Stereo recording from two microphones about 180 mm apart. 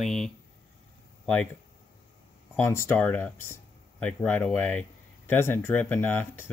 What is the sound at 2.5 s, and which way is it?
Speech, 15° left (ahead or behind).